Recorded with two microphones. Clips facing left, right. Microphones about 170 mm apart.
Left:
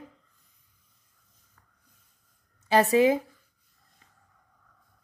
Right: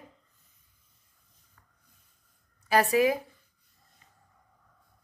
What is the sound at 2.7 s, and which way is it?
Speech, 25° left (ahead or behind).